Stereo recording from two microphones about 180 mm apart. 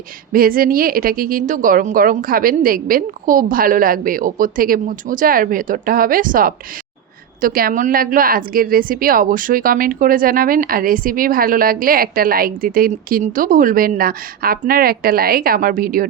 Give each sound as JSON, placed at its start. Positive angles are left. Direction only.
{"t": 0.3, "sound": "a woman's voice", "side_deg": -55}